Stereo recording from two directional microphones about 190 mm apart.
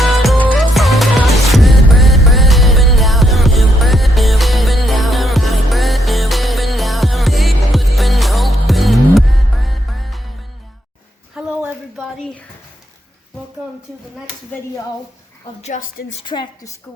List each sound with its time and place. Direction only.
0.0 s music: centre (ahead or behind)
11.3 s a sound: 5° right (ahead or behind)
15.6 s a woman's voice: 45° left (ahead or behind)
16.2 s a woman's voice: 25° left (ahead or behind)